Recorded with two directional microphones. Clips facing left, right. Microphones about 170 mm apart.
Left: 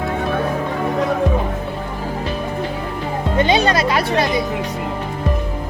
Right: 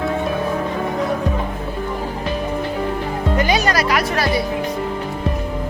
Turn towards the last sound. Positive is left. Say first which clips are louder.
# left 1 dB
turn(degrees=25)  # may be behind; listen again after turning